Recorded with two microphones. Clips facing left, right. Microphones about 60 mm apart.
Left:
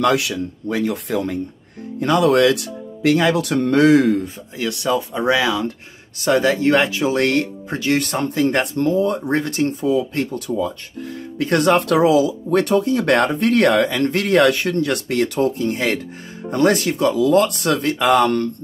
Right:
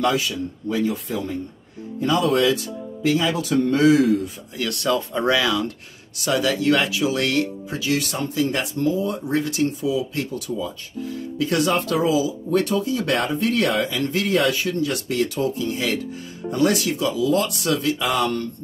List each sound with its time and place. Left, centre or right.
0.0 s speech: left
4.6 s speech: left
6.1 s speech: left